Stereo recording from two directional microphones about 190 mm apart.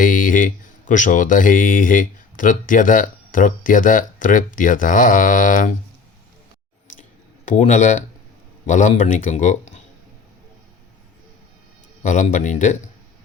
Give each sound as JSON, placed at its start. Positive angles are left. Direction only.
{"t": 0.0, "sound": "speech", "side_deg": 45}
{"t": 7.4, "sound": "speech", "side_deg": 40}
{"t": 12.0, "sound": "speech", "side_deg": 40}